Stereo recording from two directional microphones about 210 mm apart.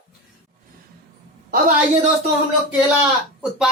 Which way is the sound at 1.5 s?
35° right (ahead or behind).